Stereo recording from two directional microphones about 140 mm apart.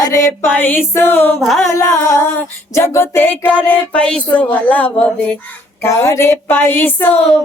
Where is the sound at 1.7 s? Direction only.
25° left (ahead or behind).